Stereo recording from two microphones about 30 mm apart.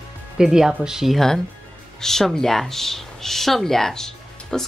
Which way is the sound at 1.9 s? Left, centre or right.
Centre.